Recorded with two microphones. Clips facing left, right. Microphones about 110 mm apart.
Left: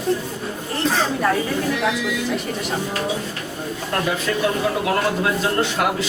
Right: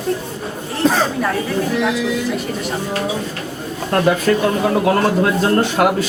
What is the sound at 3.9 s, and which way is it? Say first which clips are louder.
Speech: right 8 dB; 50° right (ahead or behind).